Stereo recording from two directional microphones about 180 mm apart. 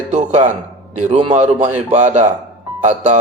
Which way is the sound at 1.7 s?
40° right (ahead or behind).